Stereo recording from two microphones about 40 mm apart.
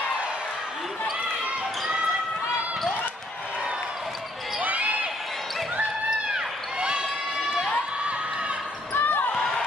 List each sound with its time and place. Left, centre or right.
4.6 s basketball bounce: right
6.3 s basketball bounce: right
8.9 s basketball bounce: left